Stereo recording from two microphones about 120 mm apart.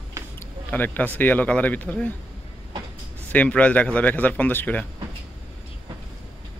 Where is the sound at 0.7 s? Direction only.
15° left (ahead or behind).